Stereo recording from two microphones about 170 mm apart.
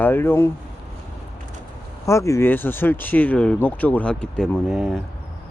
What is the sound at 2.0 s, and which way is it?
Speech, 15° left (ahead or behind).